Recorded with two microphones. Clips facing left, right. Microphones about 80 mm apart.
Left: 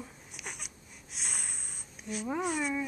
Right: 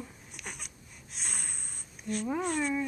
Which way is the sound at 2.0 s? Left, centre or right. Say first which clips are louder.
Right 1 dB; centre.